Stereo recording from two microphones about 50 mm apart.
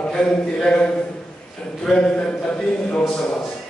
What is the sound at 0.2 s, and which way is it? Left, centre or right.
A man's voice, centre.